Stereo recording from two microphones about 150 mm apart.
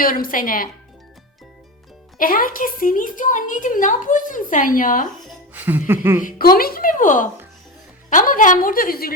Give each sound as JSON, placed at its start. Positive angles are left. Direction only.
{"t": 0.0, "sound": "a woman's voice", "side_deg": 70}
{"t": 2.1, "sound": "a woman's voice", "side_deg": 70}
{"t": 5.5, "sound": "speech", "side_deg": -10}
{"t": 6.2, "sound": "a woman's voice", "side_deg": 75}